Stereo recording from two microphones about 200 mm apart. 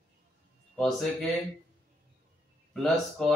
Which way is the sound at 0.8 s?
Centre (ahead or behind).